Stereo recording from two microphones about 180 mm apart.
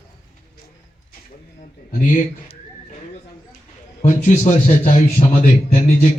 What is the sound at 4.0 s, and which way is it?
A man's voice, 40° left (ahead or behind).